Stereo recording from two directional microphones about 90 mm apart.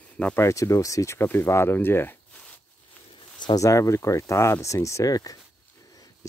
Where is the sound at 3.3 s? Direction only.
55° left (ahead or behind).